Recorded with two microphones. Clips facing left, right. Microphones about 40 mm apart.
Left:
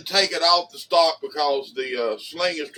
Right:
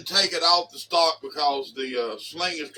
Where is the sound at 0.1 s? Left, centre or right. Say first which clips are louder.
Left 3 dB; left.